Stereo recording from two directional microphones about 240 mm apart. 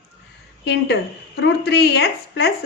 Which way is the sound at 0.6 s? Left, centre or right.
Left.